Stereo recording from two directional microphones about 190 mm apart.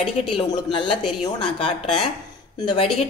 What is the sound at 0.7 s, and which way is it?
A woman's voice, 30° left (ahead or behind).